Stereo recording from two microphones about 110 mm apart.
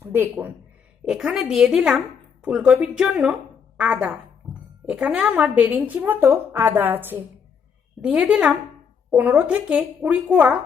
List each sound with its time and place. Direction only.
0.0 s a man's voice: 20° right (ahead or behind)
1.0 s a woman's voice: 5° right (ahead or behind)